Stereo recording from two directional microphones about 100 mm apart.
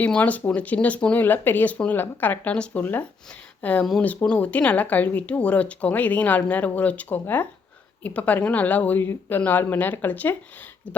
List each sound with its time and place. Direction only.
0.0 s speech: 15° left (ahead or behind)